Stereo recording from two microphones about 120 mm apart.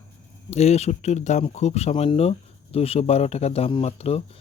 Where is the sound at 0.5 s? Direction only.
65° left (ahead or behind).